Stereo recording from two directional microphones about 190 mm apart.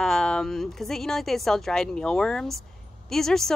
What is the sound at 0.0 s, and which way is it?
Speech, centre (ahead or behind).